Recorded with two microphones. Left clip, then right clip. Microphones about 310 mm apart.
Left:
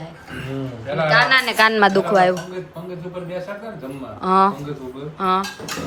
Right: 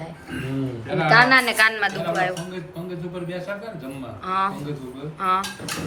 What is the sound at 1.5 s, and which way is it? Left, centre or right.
Speech, centre.